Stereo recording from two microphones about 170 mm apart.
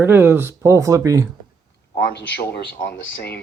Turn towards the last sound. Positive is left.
turn(degrees=70)  # may be behind; listen again after turning